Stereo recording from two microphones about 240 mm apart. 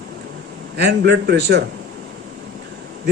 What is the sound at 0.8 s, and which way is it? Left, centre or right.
Speech, right.